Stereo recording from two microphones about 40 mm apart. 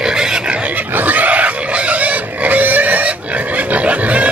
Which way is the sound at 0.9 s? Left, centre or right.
Right.